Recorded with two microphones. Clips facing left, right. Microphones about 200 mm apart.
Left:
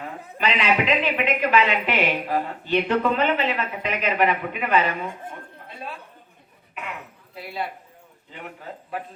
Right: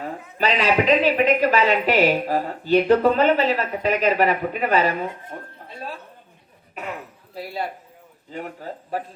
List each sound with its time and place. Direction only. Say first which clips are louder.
0.0 s a woman's voice: right 3 dB; 35° right (ahead or behind)
8.3 s a woman's voice: right 6 dB; 40° right (ahead or behind)